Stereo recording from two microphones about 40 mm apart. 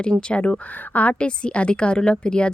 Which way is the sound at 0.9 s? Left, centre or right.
Left.